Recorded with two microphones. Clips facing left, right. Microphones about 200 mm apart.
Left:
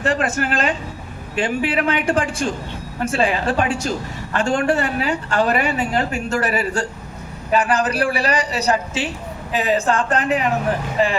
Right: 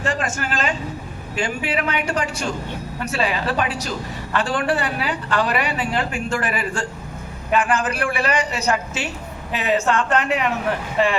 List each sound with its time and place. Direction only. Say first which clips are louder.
0.3 s a woman's voice: left 3 dB; 55° left (ahead or behind); by 10.5 s 35° left (ahead or behind)